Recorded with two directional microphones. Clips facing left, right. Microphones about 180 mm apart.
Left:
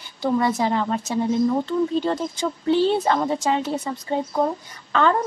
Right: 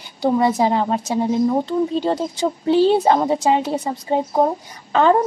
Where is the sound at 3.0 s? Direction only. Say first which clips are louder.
Right 5 dB; 30° right (ahead or behind).